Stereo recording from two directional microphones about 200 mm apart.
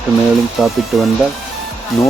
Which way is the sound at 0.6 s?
Centre (ahead or behind).